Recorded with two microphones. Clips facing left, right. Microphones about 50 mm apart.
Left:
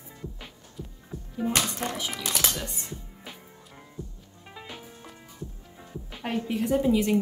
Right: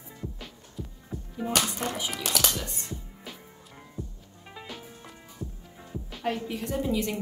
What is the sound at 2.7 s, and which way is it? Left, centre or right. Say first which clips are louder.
Music: right 1 dB; centre.